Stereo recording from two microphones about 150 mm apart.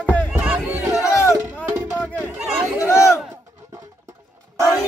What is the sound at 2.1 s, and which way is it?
Chatter, 5° right (ahead or behind).